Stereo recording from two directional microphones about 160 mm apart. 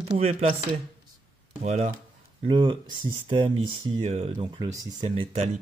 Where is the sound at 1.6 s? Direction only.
45° right (ahead or behind).